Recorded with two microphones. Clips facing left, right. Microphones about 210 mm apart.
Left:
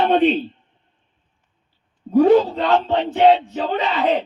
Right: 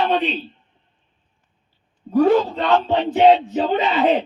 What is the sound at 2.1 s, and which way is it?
Speech, 20° left (ahead or behind).